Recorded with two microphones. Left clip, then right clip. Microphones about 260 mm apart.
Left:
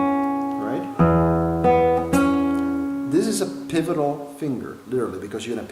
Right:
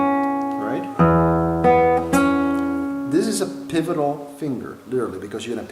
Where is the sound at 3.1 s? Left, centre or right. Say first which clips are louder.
Right 1 dB; centre.